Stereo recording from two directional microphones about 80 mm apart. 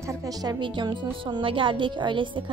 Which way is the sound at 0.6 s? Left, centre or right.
Right.